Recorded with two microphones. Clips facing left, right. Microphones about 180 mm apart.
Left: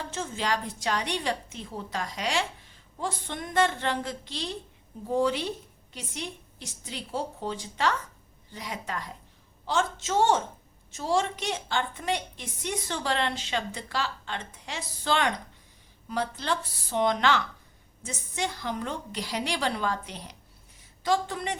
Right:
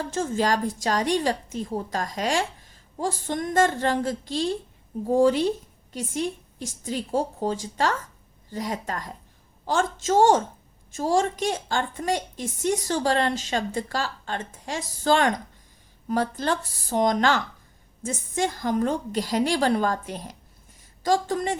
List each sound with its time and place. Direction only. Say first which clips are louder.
0.1 s a woman's voice: right 6 dB; 45° right (ahead or behind)